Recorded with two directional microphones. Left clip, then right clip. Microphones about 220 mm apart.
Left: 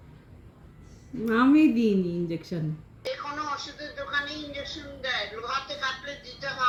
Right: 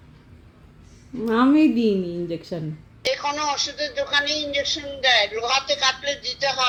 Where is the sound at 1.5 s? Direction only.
30° left (ahead or behind).